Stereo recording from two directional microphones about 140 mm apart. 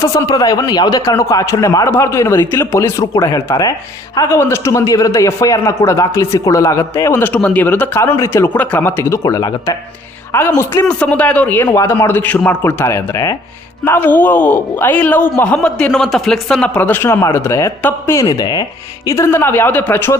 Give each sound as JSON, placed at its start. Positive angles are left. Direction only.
{"t": 0.0, "sound": "a man's voice", "side_deg": 25}